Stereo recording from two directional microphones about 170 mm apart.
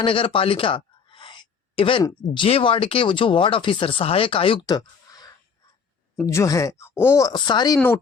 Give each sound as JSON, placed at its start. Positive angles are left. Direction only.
{"t": 0.0, "sound": "speech", "side_deg": 30}
{"t": 1.1, "sound": "gasp", "side_deg": 30}
{"t": 2.0, "sound": "speech", "side_deg": 30}